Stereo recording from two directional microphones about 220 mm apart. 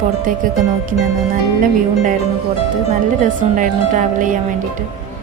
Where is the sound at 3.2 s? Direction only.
35° right (ahead or behind).